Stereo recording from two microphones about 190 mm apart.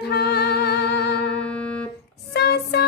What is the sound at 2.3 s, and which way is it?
Music, 55° left (ahead or behind).